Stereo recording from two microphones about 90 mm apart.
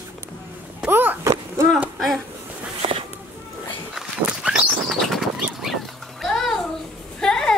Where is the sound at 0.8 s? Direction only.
20° right (ahead or behind).